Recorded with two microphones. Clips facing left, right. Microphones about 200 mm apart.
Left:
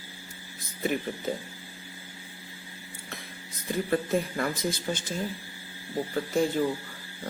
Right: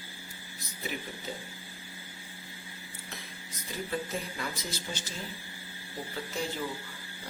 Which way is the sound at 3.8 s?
55° left (ahead or behind).